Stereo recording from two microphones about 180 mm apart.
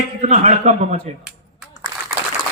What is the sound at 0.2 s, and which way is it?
Speech, 40° right (ahead or behind).